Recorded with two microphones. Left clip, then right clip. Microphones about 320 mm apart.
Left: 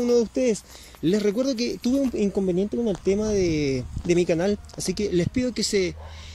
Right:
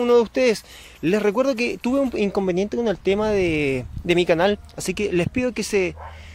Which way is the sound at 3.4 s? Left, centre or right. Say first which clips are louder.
Right 3 dB; centre.